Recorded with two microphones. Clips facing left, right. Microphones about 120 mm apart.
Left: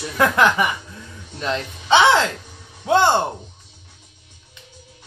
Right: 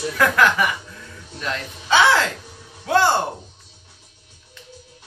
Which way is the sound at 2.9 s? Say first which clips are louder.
Left 2 dB; 20° left (ahead or behind).